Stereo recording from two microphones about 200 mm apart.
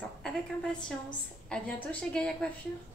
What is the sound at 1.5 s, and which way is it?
Speech, 5° left (ahead or behind).